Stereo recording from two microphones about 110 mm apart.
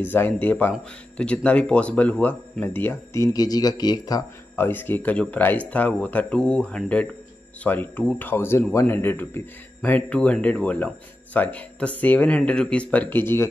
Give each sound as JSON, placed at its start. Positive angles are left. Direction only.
{"t": 0.0, "sound": "speech", "side_deg": 20}
{"t": 4.6, "sound": "speech", "side_deg": 20}